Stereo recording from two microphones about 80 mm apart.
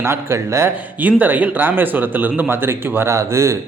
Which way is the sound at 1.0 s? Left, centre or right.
Right.